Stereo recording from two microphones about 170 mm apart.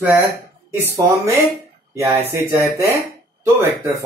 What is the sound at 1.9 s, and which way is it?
Speech, 15° right (ahead or behind).